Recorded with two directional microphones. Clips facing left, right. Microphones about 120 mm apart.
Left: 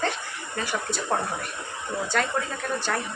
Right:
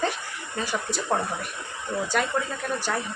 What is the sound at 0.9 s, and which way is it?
Speech, 15° right (ahead or behind).